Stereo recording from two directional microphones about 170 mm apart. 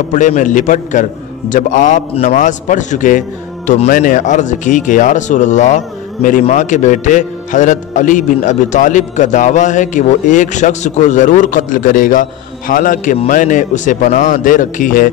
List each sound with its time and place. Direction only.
0.1 s a man's voice: 45° left (ahead or behind)